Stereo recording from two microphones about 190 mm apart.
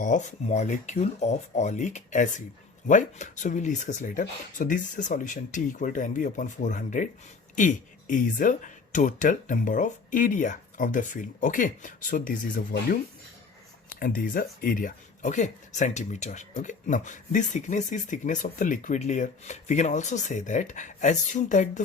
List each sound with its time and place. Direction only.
0.0 s speech: 40° left (ahead or behind)
14.0 s speech: 50° left (ahead or behind)